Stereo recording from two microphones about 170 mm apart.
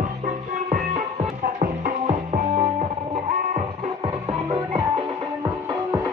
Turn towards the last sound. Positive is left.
turn(degrees=-25)  # may be behind; listen again after turning